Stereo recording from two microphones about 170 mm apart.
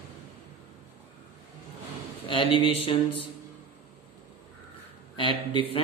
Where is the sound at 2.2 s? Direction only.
30° left (ahead or behind).